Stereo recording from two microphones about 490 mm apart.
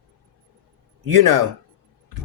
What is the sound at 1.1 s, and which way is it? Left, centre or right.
Speech, right.